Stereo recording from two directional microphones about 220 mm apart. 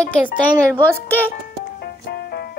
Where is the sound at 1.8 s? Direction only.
45° left (ahead or behind).